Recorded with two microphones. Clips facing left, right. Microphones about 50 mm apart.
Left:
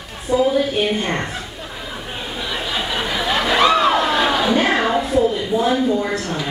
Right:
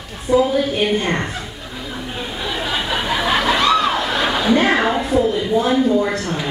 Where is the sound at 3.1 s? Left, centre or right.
Right.